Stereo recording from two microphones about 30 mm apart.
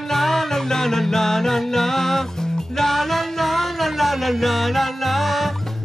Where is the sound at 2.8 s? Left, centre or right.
Centre.